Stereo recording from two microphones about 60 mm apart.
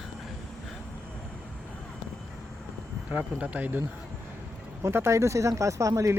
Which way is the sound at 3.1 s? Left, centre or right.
Centre.